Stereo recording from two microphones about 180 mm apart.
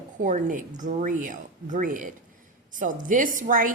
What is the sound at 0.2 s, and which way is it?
A woman's voice, 45° right (ahead or behind).